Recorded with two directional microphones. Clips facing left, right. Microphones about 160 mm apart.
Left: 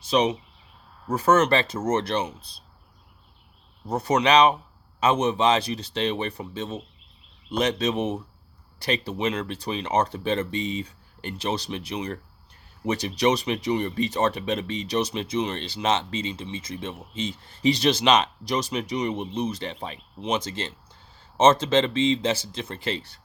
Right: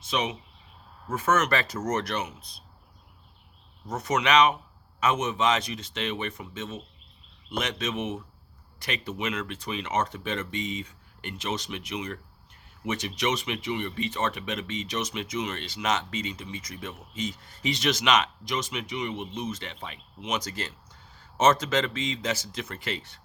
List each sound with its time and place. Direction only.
0.0 s speech: 35° left (ahead or behind)
3.8 s speech: 30° left (ahead or behind)